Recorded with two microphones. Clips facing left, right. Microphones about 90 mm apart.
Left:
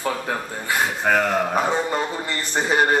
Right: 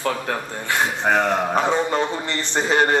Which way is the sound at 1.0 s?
20° right (ahead or behind).